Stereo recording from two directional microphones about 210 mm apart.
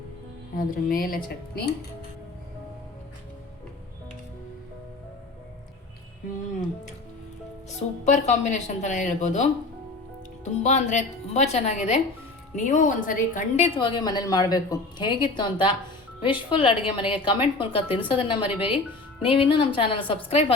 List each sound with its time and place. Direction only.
0.5 s a woman's voice: 40° left (ahead or behind)
8.0 s a woman's voice: 35° left (ahead or behind)
13.7 s a woman's voice: 20° left (ahead or behind)
18.4 s speech: 5° right (ahead or behind)
19.2 s a woman's voice: 25° left (ahead or behind)